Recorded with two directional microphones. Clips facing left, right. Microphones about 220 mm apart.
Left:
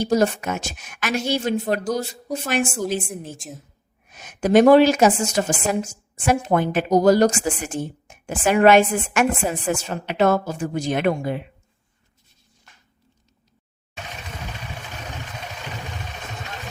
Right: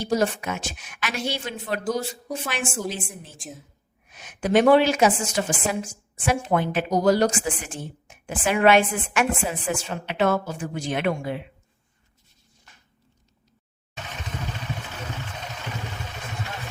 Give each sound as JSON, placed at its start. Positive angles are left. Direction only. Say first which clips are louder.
{"t": 0.0, "sound": "a woman's voice", "louder": "left 4 dB", "side_deg": 45}
{"t": 2.6, "sound": "a woman's voice", "louder": "left 3 dB", "side_deg": 0}
{"t": 4.1, "sound": "a woman's voice", "louder": "left 4 dB", "side_deg": 45}